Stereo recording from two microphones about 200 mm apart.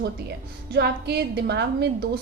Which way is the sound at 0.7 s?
55° right (ahead or behind).